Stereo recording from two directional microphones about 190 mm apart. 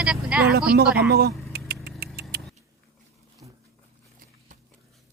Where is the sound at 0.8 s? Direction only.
5° right (ahead or behind).